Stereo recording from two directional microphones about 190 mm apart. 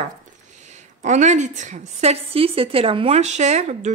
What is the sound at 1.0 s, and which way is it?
A woman's voice, 40° right (ahead or behind).